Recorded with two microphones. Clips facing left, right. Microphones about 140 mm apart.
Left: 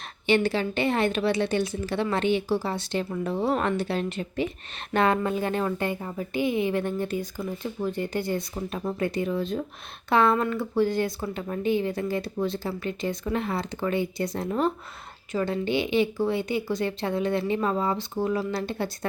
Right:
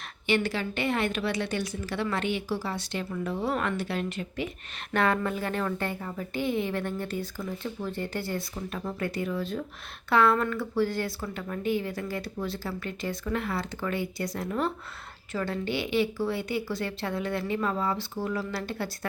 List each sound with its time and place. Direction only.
0.3 s a woman's voice: 25° left (ahead or behind)